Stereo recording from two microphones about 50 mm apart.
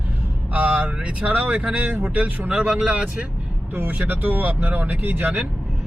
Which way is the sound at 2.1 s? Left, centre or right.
Right.